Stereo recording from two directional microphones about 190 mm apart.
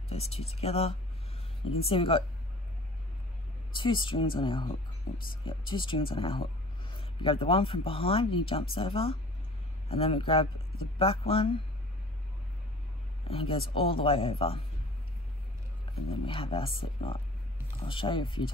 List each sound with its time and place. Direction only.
0.1 s speech: 35° left (ahead or behind)
3.7 s speech: 25° left (ahead or behind)
13.3 s speech: 30° left (ahead or behind)
16.1 s speech: 30° left (ahead or behind)